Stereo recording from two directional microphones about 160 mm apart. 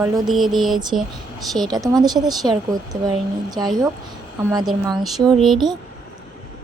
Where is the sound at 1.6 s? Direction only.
25° right (ahead or behind).